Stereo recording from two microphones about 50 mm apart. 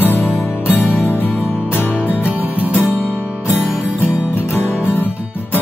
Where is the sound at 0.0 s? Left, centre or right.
Left.